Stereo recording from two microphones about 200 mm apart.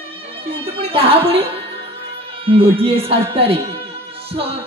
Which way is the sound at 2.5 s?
30° right (ahead or behind).